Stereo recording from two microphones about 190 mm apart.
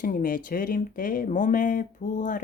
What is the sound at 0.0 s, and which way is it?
A woman's voice, 45° left (ahead or behind).